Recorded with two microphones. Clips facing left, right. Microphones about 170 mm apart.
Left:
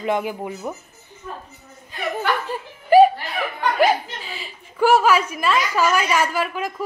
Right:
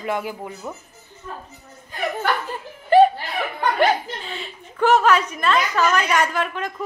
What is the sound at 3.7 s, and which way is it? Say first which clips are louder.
A woman's voice: left 2 dB; 5° left (ahead or behind).